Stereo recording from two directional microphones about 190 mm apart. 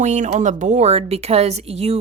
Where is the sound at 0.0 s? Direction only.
40° right (ahead or behind).